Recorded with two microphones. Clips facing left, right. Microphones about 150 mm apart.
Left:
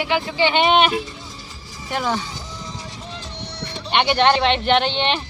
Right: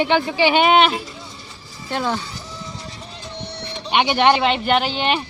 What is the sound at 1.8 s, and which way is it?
Speech, 15° left (ahead or behind).